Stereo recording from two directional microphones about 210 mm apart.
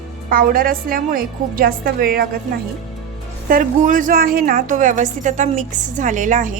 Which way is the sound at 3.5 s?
40° right (ahead or behind).